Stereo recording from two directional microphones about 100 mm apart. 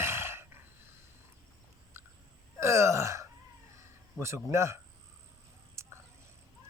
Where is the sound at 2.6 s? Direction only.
30° right (ahead or behind).